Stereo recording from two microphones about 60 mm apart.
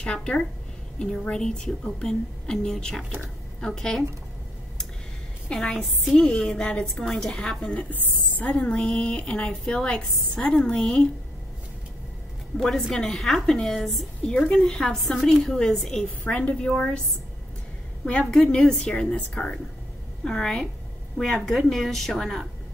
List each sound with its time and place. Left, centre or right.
0.0 s a woman's voice: centre
5.5 s a woman's voice: centre
12.5 s a woman's voice: centre
16.3 s a woman's voice: left
18.3 s a woman's voice: centre